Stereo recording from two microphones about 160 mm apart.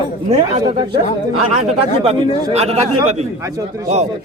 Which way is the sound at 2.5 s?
40° right (ahead or behind).